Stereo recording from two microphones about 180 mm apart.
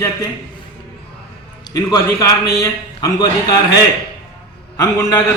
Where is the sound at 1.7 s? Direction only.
20° left (ahead or behind).